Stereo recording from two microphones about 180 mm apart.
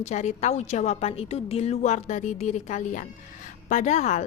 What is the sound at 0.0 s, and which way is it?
A woman's voice, 40° left (ahead or behind).